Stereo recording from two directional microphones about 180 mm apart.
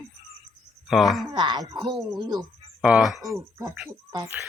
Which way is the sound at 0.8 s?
Centre (ahead or behind).